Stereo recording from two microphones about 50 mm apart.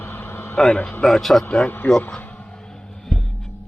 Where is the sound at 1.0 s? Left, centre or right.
Centre.